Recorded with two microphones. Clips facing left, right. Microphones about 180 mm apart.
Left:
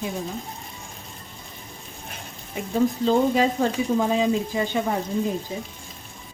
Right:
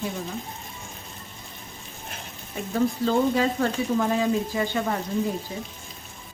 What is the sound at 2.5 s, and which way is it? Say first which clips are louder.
Speech: left 2 dB; 15° left (ahead or behind).